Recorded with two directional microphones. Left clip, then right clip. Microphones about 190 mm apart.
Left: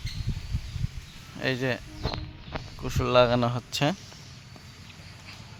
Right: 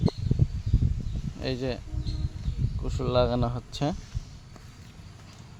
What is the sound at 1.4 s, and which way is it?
Speech, centre (ahead or behind).